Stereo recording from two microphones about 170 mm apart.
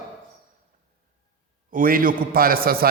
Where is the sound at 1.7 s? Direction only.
55° right (ahead or behind).